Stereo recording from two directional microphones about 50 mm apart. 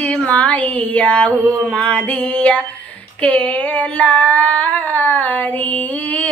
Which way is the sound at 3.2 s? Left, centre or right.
Left.